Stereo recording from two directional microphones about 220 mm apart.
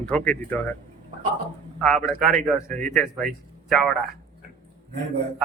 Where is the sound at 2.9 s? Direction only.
Centre (ahead or behind).